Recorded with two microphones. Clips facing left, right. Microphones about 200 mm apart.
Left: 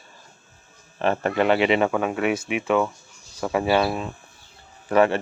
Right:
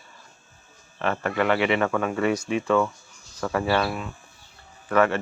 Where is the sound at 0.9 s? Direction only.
25° left (ahead or behind).